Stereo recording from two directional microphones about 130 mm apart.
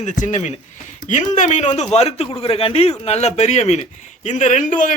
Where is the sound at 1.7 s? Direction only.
55° left (ahead or behind).